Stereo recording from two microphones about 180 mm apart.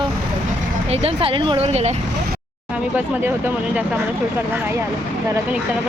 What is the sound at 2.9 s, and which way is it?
Speech, 10° right (ahead or behind).